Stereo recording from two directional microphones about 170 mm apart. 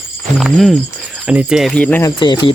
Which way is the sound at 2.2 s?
25° left (ahead or behind).